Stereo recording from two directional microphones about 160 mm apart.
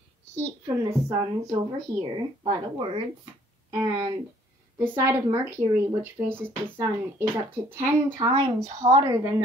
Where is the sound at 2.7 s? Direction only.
35° right (ahead or behind).